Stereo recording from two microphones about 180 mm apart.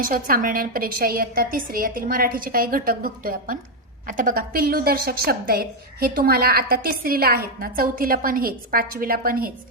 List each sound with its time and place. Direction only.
0.0 s a woman's voice: 50° right (ahead or behind)